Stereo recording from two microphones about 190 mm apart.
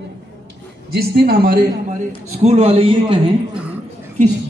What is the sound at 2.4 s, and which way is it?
Speech, 35° right (ahead or behind).